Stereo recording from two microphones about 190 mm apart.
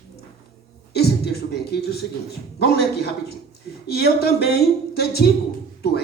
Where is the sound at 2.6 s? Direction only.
60° left (ahead or behind).